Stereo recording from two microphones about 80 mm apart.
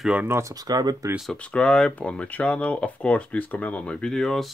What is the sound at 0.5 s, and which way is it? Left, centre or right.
Speech, right.